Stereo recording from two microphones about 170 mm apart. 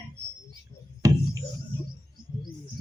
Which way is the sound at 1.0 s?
20° right (ahead or behind).